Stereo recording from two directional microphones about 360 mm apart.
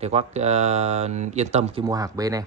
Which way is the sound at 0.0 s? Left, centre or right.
Centre.